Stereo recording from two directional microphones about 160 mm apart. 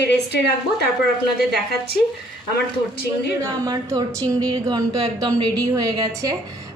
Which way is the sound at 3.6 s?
20° right (ahead or behind).